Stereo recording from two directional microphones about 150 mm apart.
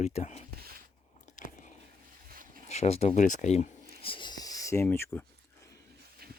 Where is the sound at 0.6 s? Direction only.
85° right.